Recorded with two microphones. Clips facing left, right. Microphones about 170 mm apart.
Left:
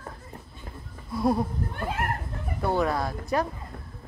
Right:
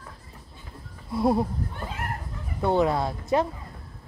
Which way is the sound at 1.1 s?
25° right (ahead or behind).